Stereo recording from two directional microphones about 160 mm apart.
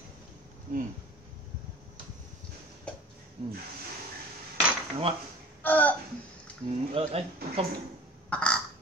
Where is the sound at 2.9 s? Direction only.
5° left (ahead or behind).